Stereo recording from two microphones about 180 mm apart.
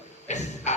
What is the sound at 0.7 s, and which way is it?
Music, 40° left (ahead or behind).